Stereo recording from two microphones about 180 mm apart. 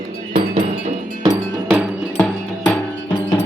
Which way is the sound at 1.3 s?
Centre (ahead or behind).